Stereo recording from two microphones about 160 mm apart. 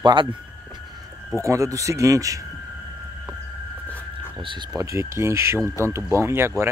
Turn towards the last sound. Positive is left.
turn(degrees=-15)  # may be behind; listen again after turning